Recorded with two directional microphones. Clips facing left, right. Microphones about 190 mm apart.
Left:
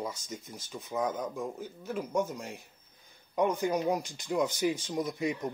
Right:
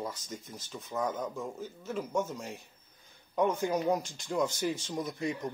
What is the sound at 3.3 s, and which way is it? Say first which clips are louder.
Speech: left 1 dB; centre (ahead or behind).